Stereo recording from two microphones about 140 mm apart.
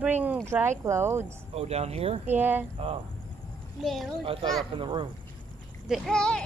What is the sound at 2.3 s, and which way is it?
Speech, 15° right (ahead or behind).